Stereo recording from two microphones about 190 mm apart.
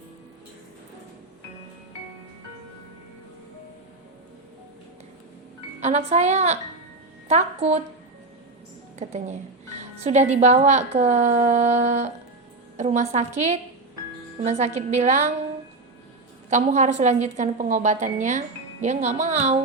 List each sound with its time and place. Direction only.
5.8 s a woman's voice: 35° right (ahead or behind)
9.0 s a woman's voice: 35° right (ahead or behind)
16.5 s a woman's voice: 40° right (ahead or behind)